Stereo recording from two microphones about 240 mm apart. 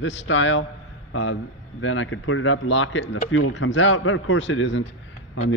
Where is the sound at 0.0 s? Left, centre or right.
Left.